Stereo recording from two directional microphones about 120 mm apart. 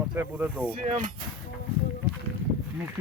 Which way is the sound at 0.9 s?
90° right.